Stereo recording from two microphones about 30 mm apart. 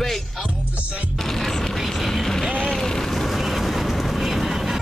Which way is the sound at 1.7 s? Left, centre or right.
Centre.